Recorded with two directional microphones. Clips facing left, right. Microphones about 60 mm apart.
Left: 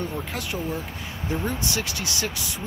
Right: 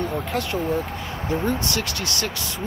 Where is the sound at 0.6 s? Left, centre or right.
Right.